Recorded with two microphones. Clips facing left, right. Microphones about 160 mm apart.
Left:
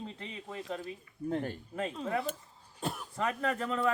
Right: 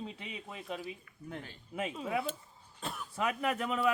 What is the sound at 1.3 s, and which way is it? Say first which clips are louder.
Speech: left 11 dB; 50° left (ahead or behind).